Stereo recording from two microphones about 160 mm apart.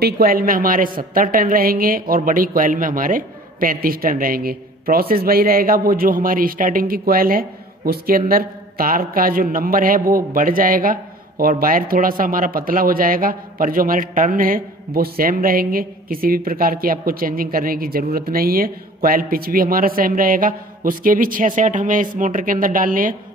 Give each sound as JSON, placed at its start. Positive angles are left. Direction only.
{"t": 0.0, "sound": "speech", "side_deg": -65}